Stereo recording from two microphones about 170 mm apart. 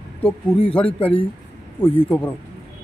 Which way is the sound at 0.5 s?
35° left (ahead or behind).